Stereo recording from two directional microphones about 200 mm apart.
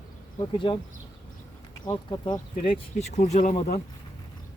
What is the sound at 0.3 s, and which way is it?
Speech, 25° left (ahead or behind).